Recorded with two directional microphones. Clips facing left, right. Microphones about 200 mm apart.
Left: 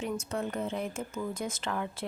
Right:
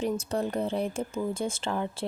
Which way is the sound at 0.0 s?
35° right (ahead or behind).